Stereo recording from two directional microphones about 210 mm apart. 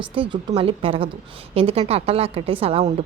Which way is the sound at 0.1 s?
25° right (ahead or behind).